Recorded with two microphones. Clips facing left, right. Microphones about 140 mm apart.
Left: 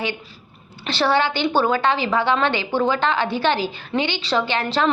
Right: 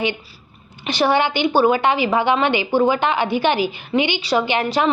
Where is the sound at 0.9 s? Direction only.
15° right (ahead or behind).